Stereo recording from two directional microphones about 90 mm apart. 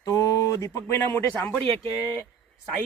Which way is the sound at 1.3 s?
10° left (ahead or behind).